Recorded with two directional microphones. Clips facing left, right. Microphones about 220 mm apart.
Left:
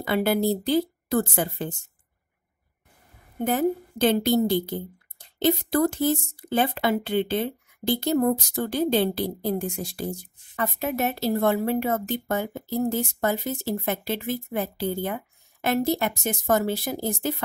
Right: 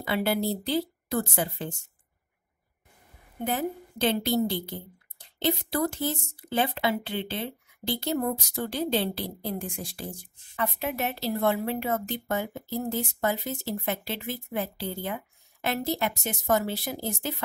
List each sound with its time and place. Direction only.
0.0 s speech: 50° left (ahead or behind)
3.4 s speech: 45° left (ahead or behind)